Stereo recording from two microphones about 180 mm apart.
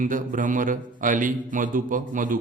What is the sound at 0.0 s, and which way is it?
A man's voice, 50° right (ahead or behind).